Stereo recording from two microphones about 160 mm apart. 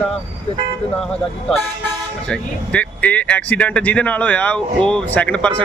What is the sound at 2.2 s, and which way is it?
Speech, 5° left (ahead or behind).